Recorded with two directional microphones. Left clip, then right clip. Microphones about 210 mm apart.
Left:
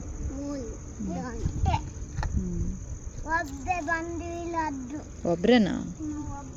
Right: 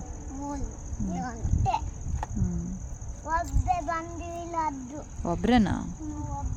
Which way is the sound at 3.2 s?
Centre (ahead or behind).